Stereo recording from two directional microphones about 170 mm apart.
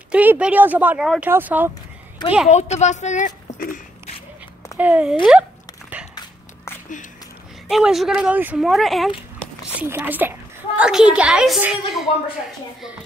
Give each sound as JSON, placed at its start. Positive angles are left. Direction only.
{"t": 0.1, "sound": "speech", "side_deg": -10}
{"t": 2.5, "sound": "a woman's voice", "side_deg": 45}
{"t": 4.7, "sound": "speech", "side_deg": -10}
{"t": 7.6, "sound": "speech", "side_deg": -5}
{"t": 9.8, "sound": "speech", "side_deg": -10}